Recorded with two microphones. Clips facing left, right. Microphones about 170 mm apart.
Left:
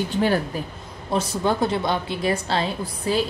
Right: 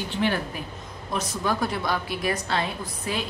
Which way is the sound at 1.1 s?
30° left (ahead or behind).